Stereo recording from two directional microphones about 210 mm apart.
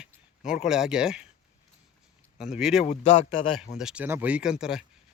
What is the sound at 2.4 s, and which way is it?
Speech, centre (ahead or behind).